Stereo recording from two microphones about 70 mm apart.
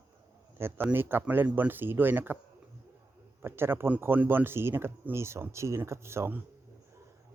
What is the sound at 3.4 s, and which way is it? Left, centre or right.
Speech, right.